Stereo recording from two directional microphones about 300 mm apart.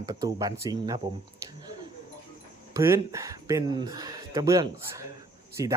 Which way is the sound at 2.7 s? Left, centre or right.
Centre.